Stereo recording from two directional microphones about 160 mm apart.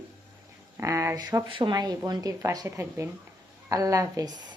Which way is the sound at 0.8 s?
20° right (ahead or behind).